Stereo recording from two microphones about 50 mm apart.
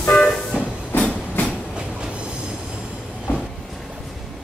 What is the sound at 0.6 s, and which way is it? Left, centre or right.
Train, left.